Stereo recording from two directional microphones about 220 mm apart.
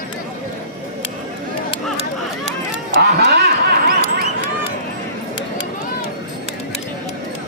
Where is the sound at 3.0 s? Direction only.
45° right (ahead or behind).